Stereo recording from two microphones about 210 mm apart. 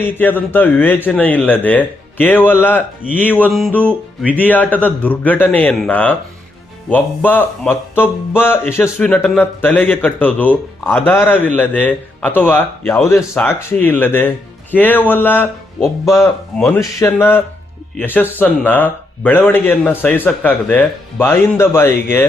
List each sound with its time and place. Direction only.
0.0 s speech: 10° left (ahead or behind)